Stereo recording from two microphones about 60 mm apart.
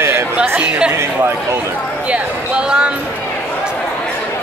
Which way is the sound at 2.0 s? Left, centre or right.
Centre.